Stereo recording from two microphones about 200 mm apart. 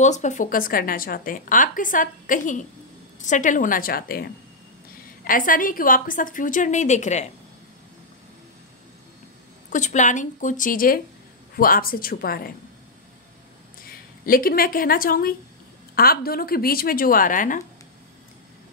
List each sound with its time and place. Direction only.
0.0 s a woman's voice: 35° left (ahead or behind)
9.7 s a woman's voice: 35° left (ahead or behind)
13.8 s a woman's voice: 45° left (ahead or behind)